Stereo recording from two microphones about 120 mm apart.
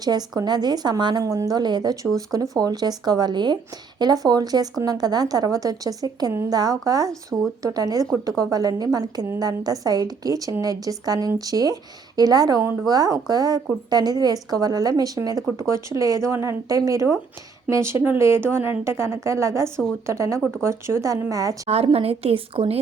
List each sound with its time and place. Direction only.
0.0 s a woman's voice: 35° right (ahead or behind)
21.7 s a woman's voice: 55° right (ahead or behind)